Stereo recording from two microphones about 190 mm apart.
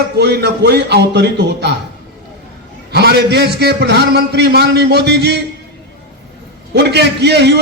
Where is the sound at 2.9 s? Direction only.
60° right (ahead or behind).